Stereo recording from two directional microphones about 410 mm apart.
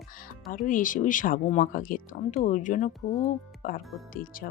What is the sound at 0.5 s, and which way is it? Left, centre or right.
Speech, centre.